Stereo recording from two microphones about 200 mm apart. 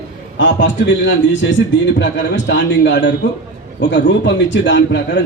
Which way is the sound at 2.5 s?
65° left (ahead or behind).